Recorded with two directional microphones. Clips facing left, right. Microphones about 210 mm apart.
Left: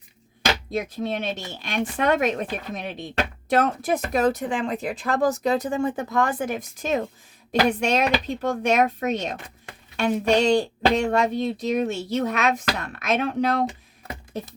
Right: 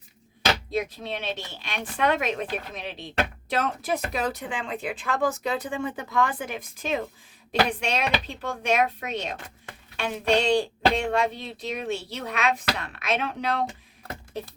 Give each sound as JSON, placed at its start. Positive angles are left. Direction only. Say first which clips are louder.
{"t": 0.7, "sound": "speech", "louder": "left 3 dB", "side_deg": 45}